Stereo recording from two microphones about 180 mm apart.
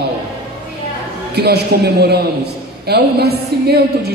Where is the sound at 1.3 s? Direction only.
65° right (ahead or behind).